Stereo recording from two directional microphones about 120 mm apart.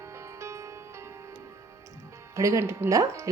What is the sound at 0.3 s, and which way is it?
Music, 25° right (ahead or behind).